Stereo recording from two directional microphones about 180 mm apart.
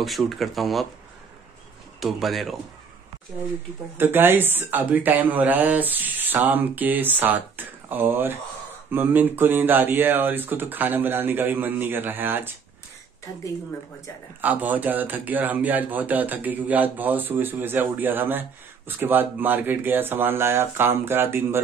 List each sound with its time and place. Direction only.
0.0 s speech: centre (ahead or behind)
2.0 s speech: centre (ahead or behind)
4.0 s speech: 10° right (ahead or behind)
14.4 s speech: 10° right (ahead or behind)